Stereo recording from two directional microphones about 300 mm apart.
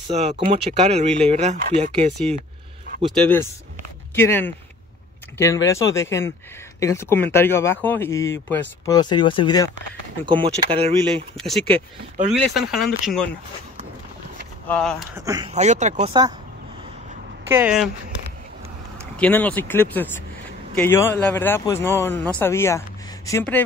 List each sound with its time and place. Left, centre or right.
0.1 s speech: right
4.1 s speech: centre
10.2 s speech: centre
11.3 s speech: centre
14.7 s speech: centre
15.1 s speech: centre
15.5 s speech: right
17.5 s speech: centre
19.1 s speech: centre